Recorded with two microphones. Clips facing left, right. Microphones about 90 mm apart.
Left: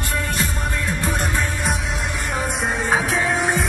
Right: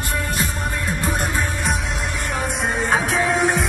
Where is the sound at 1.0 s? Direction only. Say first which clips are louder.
Right 1 dB; 30° right (ahead or behind).